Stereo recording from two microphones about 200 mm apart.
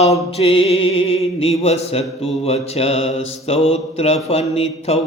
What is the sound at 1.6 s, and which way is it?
Mantra, 30° left (ahead or behind).